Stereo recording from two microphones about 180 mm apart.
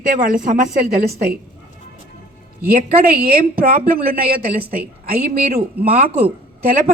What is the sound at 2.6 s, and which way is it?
A woman's voice, 55° right (ahead or behind).